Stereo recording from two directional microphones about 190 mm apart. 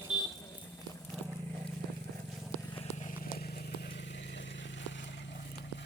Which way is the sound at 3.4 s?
55° left (ahead or behind).